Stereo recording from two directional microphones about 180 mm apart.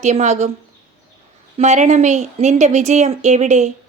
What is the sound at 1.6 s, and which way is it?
A woman's voice, 40° right (ahead or behind).